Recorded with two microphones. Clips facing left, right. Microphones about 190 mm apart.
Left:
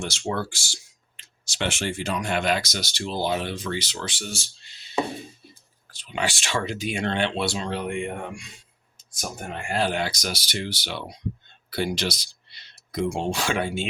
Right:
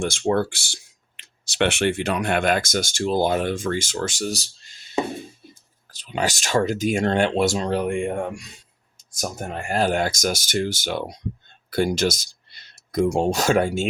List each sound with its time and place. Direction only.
0.0 s speech: 50° right (ahead or behind)
5.9 s speech: 40° right (ahead or behind)
9.6 s speech: 40° right (ahead or behind)